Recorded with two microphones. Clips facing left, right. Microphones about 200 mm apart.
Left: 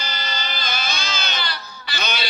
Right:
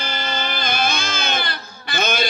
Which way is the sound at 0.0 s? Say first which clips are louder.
Right 5 dB; 55° right (ahead or behind).